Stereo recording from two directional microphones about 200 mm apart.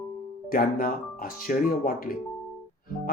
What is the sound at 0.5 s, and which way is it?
Speech, 45° left (ahead or behind).